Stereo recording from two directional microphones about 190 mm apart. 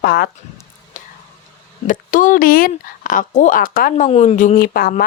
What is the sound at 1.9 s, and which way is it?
Speech, 45° left (ahead or behind).